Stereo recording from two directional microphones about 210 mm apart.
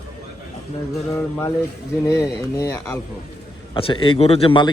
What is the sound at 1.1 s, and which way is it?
Speech, 10° left (ahead or behind).